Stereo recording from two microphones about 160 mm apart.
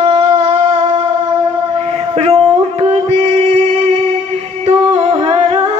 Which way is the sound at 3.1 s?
45° right (ahead or behind).